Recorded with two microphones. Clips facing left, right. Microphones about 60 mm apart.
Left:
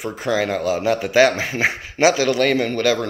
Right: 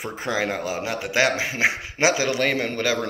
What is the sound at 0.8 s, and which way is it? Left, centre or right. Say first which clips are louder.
A man's voice: left 7 dB; centre.